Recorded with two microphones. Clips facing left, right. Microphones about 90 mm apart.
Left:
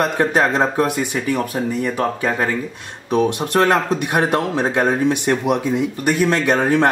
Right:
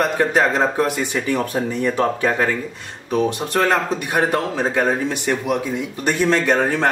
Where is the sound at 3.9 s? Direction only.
15° left (ahead or behind).